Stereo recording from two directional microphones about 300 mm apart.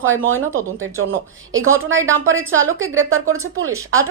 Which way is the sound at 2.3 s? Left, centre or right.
Right.